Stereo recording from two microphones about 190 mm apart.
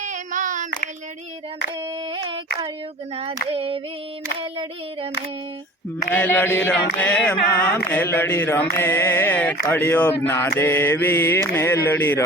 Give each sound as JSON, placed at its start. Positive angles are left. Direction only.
{"t": 0.0, "sound": "child singing", "side_deg": -40}
{"t": 2.1, "sound": "a sound", "side_deg": -25}
{"t": 3.5, "sound": "female singing", "side_deg": -30}
{"t": 6.1, "sound": "chant", "side_deg": 10}